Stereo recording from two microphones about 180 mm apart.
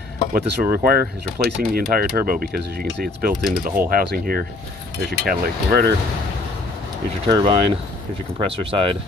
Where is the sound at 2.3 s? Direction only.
60° right (ahead or behind).